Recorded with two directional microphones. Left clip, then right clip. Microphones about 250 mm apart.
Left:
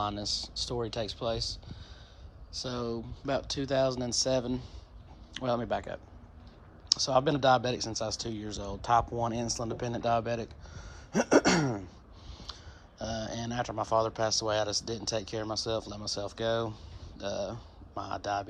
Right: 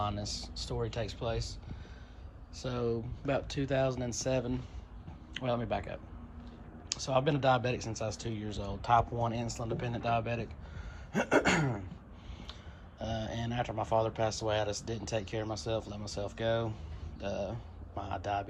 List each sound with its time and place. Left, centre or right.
0.0 s speech: centre
2.6 s speech: centre
7.0 s speech: centre
11.1 s a sound: centre
13.0 s speech: centre